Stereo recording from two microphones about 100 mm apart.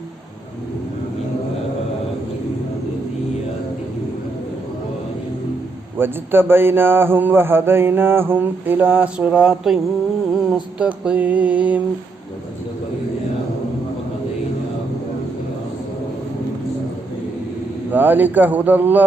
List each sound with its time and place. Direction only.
6.0 s a man's voice: 20° right (ahead or behind); by 9.8 s 5° right (ahead or behind)
10.3 s music: 10° right (ahead or behind)
17.9 s music: 20° right (ahead or behind)